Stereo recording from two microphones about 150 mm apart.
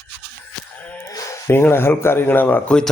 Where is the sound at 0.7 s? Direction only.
10° left (ahead or behind).